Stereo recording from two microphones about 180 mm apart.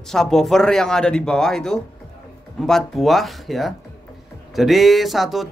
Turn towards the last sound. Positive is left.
turn(degrees=0)  # may be behind; listen again after turning